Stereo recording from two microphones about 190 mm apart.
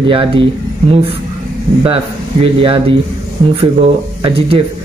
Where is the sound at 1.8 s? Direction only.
30° right (ahead or behind).